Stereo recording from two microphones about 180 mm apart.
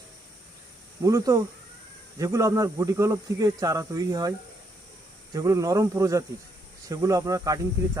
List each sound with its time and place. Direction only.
1.0 s speech: 20° right (ahead or behind)